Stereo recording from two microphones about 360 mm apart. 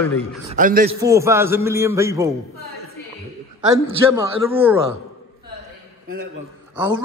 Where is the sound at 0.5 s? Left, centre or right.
Right.